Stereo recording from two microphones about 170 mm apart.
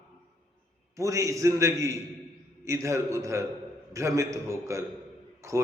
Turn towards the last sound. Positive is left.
turn(degrees=-15)  # may be behind; listen again after turning